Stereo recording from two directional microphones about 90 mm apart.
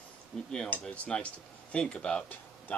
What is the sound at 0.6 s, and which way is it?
A man's voice, 15° left (ahead or behind).